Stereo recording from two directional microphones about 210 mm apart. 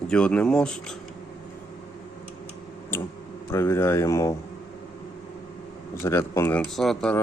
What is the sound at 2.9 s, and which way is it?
Speech, 10° left (ahead or behind).